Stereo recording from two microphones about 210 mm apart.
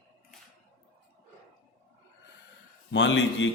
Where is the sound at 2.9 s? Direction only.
60° left (ahead or behind).